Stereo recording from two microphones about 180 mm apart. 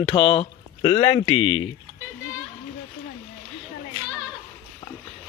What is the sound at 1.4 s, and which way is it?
Speech, 90° left.